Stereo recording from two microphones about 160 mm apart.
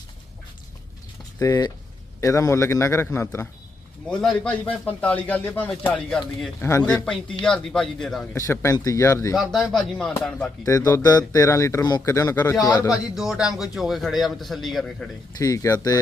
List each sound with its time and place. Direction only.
1.4 s a man's voice: 20° left (ahead or behind); by 6.5 s 5° left (ahead or behind)
6.6 s a man's voice: 15° left (ahead or behind)
6.8 s a man's voice: 5° left (ahead or behind)
8.4 s speech: 20° left (ahead or behind)
9.3 s a man's voice: centre (ahead or behind)
10.6 s speech: 20° left (ahead or behind)
12.9 s a man's voice: 5° right (ahead or behind)
15.4 s speech: 20° left (ahead or behind)